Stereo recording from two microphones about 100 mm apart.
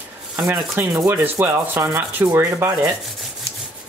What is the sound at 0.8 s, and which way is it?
Sanding, 20° right (ahead or behind).